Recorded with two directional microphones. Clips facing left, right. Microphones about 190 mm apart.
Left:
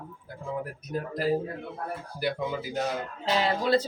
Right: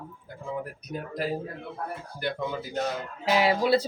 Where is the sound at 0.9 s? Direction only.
Centre (ahead or behind).